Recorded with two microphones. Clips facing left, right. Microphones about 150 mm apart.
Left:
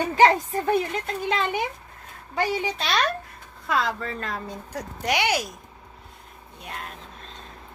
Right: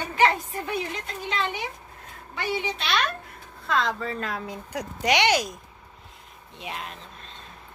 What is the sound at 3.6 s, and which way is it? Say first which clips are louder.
Speech: even; 5° left (ahead or behind).